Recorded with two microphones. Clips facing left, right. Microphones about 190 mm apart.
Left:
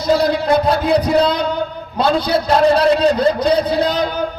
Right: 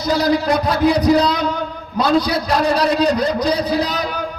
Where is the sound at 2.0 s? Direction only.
25° left (ahead or behind).